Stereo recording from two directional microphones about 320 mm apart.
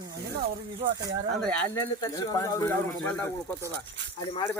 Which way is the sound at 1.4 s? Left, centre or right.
Centre.